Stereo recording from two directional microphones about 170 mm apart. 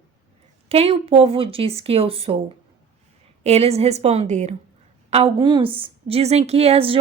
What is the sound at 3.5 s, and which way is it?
A woman's voice, 40° right (ahead or behind).